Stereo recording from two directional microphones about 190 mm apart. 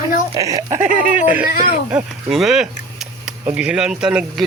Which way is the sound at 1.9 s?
Centre (ahead or behind).